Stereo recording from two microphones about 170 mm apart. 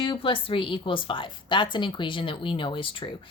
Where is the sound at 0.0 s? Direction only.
30° left (ahead or behind).